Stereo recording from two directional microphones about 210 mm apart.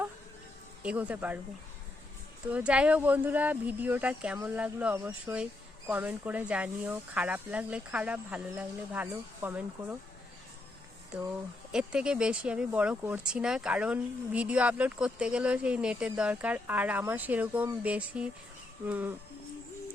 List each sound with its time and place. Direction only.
0.8 s speech: 5° right (ahead or behind)
2.5 s speech: 5° right (ahead or behind)
11.7 s speech: 5° right (ahead or behind)